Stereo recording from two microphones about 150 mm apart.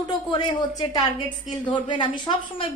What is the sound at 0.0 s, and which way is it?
A woman's voice, 30° left (ahead or behind).